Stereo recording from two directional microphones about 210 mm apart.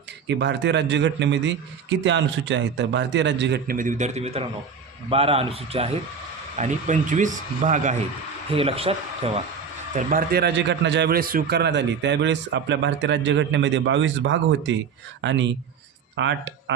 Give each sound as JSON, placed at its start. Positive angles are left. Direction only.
{"t": 0.3, "sound": "a man's voice", "side_deg": -55}
{"t": 9.9, "sound": "a man's voice", "side_deg": -40}